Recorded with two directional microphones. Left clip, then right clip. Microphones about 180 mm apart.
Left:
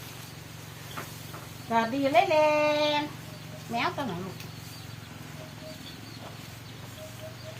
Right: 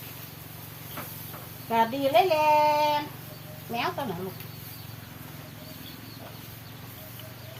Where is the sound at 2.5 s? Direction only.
15° right (ahead or behind).